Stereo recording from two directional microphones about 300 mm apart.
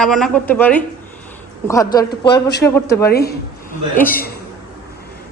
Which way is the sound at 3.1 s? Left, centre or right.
Left.